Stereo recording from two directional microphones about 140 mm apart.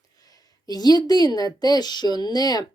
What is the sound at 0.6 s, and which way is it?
A woman's voice, 30° left (ahead or behind).